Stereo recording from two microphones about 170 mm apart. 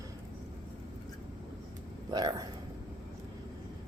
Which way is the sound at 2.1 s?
25° right (ahead or behind).